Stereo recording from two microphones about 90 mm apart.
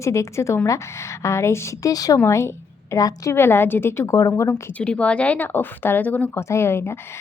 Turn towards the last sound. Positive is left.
turn(degrees=30)  # may be behind; listen again after turning